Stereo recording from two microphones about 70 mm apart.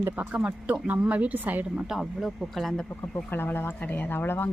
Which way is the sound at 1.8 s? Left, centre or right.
Centre.